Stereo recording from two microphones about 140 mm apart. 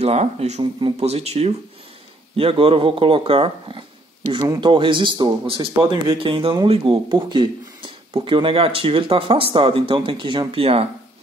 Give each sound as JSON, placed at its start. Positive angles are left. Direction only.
{"t": 0.0, "sound": "speech", "side_deg": -50}